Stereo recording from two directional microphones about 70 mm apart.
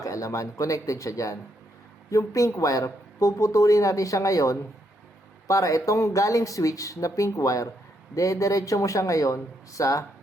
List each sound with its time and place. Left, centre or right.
0.0 s speech: left